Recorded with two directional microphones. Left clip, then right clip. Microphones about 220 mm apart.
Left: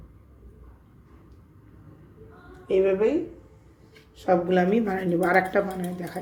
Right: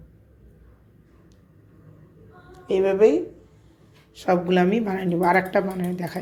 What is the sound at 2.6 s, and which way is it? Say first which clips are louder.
Speech: right 4 dB; 30° right (ahead or behind).